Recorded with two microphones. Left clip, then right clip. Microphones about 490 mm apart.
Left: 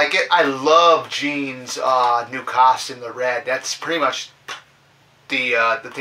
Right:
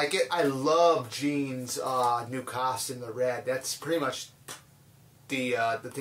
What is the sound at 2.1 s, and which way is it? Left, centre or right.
Speech, right.